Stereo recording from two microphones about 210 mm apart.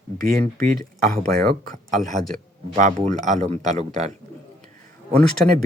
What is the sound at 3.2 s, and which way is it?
Speech, 35° right (ahead or behind).